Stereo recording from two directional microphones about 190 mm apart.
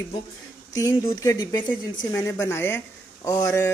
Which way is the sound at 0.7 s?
20° left (ahead or behind).